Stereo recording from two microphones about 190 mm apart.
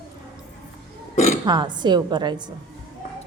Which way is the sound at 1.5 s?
25° right (ahead or behind).